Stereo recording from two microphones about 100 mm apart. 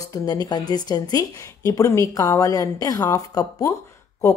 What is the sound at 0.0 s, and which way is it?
Speech, 40° left (ahead or behind).